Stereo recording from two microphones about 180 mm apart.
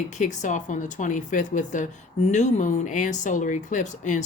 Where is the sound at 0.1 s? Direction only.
40° left (ahead or behind).